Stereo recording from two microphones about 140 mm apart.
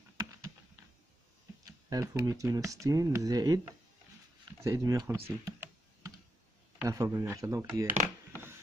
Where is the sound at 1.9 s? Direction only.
25° right (ahead or behind).